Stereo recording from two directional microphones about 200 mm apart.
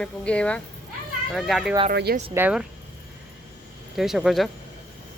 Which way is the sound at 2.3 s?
5° right (ahead or behind).